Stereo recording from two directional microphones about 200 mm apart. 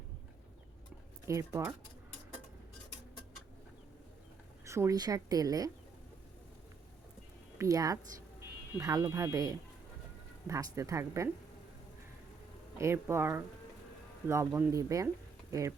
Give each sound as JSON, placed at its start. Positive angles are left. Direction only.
{"t": 1.2, "sound": "speech", "side_deg": -15}
{"t": 4.6, "sound": "speech", "side_deg": -15}
{"t": 7.6, "sound": "speech", "side_deg": -15}
{"t": 12.7, "sound": "speech", "side_deg": -15}